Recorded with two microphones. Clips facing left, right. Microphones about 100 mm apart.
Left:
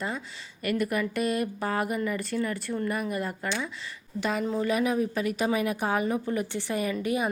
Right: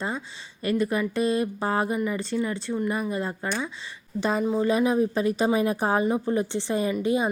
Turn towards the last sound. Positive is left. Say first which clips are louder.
# right 4 dB
turn(degrees=-25)  # may be behind; listen again after turning